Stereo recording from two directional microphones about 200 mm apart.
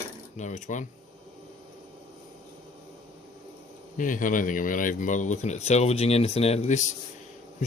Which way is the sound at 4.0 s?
40° left (ahead or behind).